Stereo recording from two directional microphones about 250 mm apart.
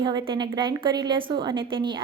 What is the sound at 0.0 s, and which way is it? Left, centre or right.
A woman's voice, centre.